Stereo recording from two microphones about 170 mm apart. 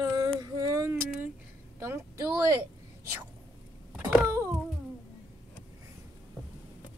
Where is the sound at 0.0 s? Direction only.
20° right (ahead or behind).